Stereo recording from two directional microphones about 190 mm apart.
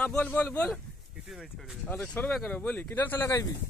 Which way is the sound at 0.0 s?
5° left (ahead or behind).